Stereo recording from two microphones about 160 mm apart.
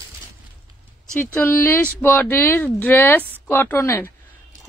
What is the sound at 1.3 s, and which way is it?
Speech, 10° left (ahead or behind).